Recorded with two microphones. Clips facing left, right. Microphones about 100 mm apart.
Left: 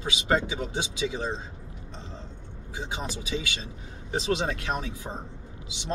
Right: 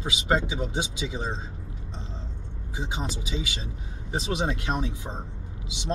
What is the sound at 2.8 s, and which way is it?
Speech, 20° right (ahead or behind).